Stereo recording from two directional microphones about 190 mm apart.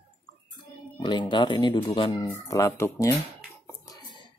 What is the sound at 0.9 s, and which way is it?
Speech, 25° left (ahead or behind).